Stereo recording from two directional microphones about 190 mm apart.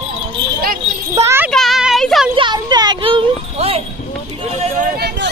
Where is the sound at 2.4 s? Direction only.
25° right (ahead or behind).